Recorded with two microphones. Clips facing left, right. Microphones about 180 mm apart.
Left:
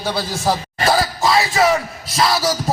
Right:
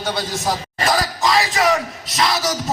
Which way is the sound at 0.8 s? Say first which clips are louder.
Left 2 dB; 30° left (ahead or behind).